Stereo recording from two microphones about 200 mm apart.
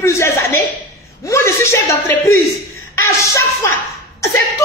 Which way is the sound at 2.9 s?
15° left (ahead or behind).